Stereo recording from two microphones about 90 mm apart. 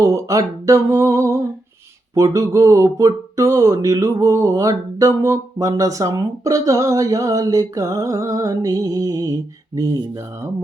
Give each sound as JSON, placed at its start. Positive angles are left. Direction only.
{"t": 0.0, "sound": "speech", "side_deg": -40}